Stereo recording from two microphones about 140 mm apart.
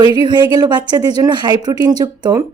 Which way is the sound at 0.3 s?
30° right (ahead or behind).